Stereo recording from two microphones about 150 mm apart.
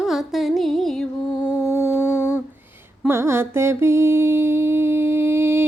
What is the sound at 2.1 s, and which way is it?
Humming, 20° left (ahead or behind).